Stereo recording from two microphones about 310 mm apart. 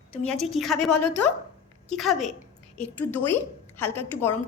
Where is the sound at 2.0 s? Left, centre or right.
Centre.